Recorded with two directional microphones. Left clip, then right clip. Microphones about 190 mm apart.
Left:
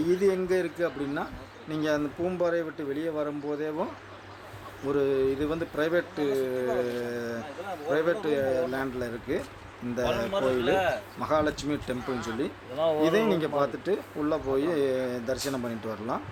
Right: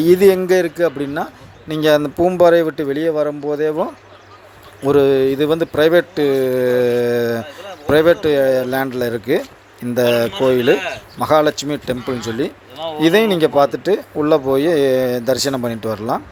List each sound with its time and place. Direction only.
0.0 s speech: 45° right (ahead or behind)
4.9 s speech: 40° right (ahead or behind)